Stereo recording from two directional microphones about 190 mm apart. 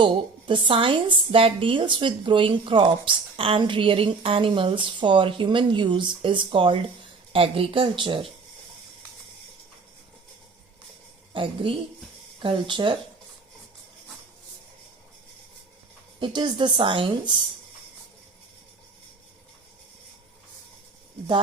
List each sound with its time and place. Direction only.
0.0 s a woman's voice: 25° right (ahead or behind)
11.3 s a woman's voice: 25° right (ahead or behind)
16.2 s a woman's voice: 25° right (ahead or behind)